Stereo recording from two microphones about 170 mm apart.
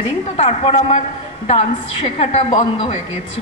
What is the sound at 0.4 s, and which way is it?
A woman's voice, 35° left (ahead or behind).